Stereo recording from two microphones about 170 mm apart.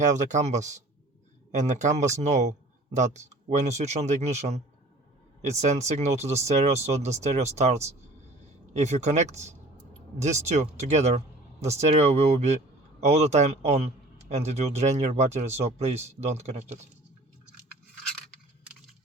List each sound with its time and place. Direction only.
0.0 s speech: 45° right (ahead or behind)